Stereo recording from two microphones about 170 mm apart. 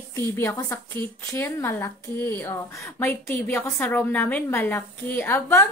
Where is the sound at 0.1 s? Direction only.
15° left (ahead or behind).